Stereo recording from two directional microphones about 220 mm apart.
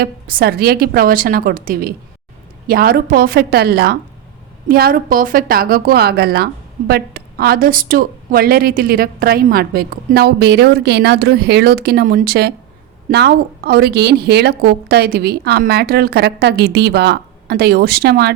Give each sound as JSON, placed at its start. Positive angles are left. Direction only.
{"t": 0.0, "sound": "a woman's voice", "side_deg": -45}